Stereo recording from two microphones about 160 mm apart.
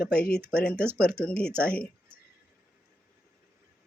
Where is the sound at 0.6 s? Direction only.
5° left (ahead or behind).